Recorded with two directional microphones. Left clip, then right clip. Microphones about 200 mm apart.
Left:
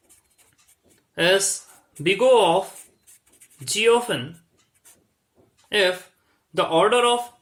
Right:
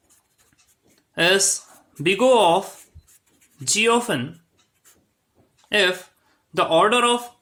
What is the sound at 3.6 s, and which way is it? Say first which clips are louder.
Speech: even; 40° right (ahead or behind).